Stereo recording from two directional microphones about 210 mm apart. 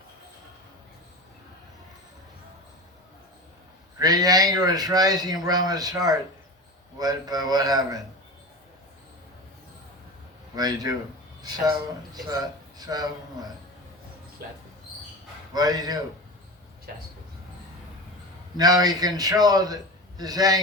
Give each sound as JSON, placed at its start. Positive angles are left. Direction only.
{"t": 3.9, "sound": "a man's voice", "side_deg": -20}
{"t": 10.5, "sound": "a man's voice", "side_deg": -20}
{"t": 12.1, "sound": "a man's voice", "side_deg": -20}
{"t": 15.5, "sound": "a man's voice", "side_deg": -20}
{"t": 18.5, "sound": "a man's voice", "side_deg": -20}